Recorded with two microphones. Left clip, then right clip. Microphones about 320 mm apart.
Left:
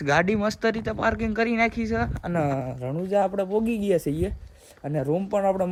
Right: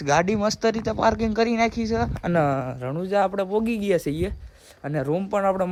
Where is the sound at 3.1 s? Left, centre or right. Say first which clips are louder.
Right 1 dB; centre.